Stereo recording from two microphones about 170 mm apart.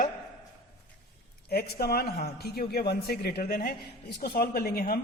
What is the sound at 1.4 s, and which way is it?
A man's voice, 65° left (ahead or behind).